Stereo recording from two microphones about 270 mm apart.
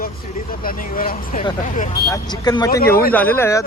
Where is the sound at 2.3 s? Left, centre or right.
Centre.